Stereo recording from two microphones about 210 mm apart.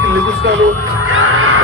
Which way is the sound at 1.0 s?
75° right (ahead or behind).